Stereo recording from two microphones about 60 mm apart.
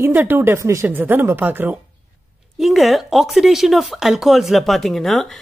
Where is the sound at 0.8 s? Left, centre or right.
Right.